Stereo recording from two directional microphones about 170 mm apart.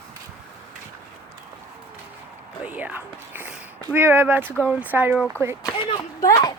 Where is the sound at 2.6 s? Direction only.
10° right (ahead or behind).